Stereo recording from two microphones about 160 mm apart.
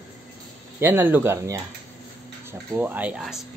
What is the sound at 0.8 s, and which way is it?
Speech, 15° right (ahead or behind).